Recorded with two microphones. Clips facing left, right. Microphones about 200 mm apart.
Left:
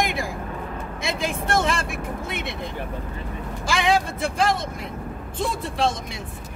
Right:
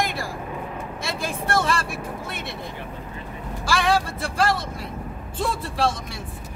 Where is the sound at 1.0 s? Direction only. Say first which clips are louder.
Left 3 dB; 20° left (ahead or behind).